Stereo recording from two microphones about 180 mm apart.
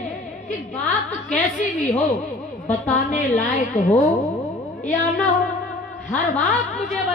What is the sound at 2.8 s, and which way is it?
Speech, 45° left (ahead or behind).